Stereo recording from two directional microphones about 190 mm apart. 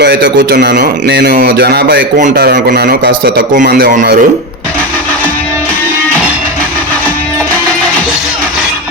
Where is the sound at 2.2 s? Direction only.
40° right (ahead or behind).